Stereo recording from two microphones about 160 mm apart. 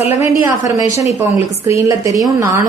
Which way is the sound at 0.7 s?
20° right (ahead or behind).